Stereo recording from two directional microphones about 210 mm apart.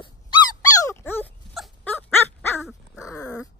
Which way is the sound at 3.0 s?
15° left (ahead or behind).